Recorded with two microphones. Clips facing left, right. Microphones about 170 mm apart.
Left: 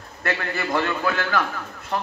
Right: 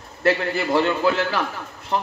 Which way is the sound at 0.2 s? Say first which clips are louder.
Right 6 dB; 30° right (ahead or behind).